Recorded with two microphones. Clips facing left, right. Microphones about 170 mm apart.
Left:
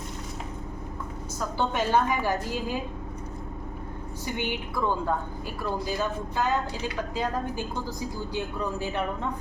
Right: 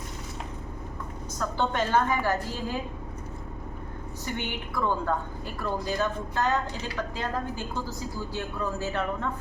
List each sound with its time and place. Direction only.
1.4 s a woman's voice: 10° left (ahead or behind)
4.4 s a woman's voice: 10° left (ahead or behind)